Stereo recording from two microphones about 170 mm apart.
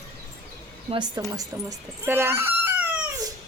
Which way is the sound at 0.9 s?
25° right (ahead or behind).